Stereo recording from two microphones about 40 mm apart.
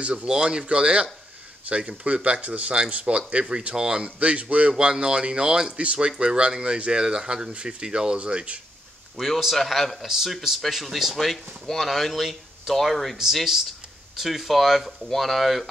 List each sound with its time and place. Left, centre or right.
0.0 s a man's voice: right
0.3 s speech: centre
4.2 s a man's voice: right
4.7 s speech: right
5.7 s speech: right
8.2 s speech: right
9.7 s speech: centre